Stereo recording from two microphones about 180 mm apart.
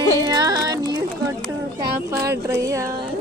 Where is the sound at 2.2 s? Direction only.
20° right (ahead or behind).